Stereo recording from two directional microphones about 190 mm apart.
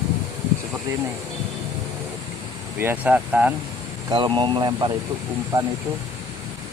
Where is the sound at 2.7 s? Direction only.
10° right (ahead or behind).